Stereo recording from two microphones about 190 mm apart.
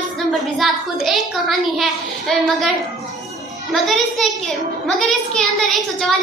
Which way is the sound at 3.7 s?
Centre (ahead or behind).